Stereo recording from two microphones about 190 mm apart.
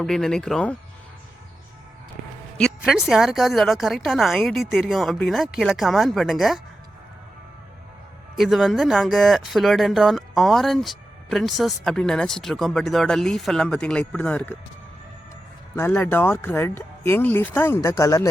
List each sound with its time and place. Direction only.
0.0 s speech: 5° left (ahead or behind)
2.6 s speech: centre (ahead or behind)
8.4 s speech: centre (ahead or behind)
15.7 s speech: 10° left (ahead or behind)